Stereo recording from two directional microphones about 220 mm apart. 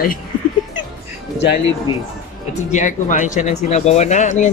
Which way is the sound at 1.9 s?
20° left (ahead or behind).